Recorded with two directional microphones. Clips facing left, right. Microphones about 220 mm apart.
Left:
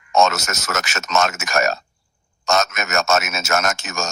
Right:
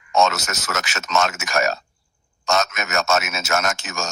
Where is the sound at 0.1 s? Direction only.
45° left (ahead or behind).